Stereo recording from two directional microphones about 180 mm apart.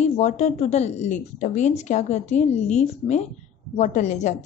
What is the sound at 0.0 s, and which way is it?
A woman's voice, 40° left (ahead or behind).